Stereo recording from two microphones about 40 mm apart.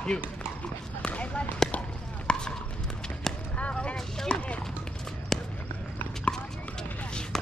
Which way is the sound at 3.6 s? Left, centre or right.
Left.